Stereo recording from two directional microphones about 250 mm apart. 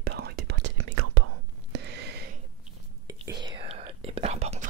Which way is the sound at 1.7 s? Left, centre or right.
Right.